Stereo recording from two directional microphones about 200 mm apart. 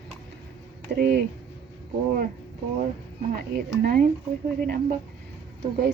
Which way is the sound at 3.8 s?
45° right (ahead or behind).